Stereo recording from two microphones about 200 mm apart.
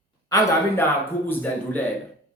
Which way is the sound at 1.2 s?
10° left (ahead or behind).